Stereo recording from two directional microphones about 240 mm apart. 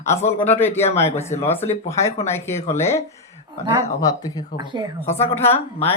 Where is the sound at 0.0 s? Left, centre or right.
Centre.